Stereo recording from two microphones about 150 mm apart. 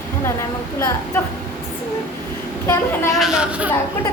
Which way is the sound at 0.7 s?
15° left (ahead or behind).